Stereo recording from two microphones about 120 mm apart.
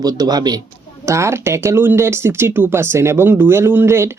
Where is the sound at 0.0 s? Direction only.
35° right (ahead or behind).